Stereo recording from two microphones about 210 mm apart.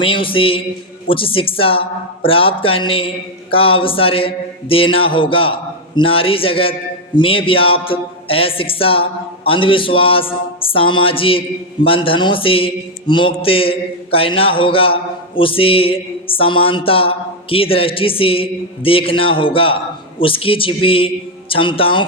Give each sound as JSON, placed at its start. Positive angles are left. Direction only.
{"t": 0.0, "sound": "a man's voice", "side_deg": 25}